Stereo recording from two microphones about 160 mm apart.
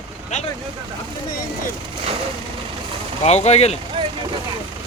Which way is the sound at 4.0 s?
30° right (ahead or behind).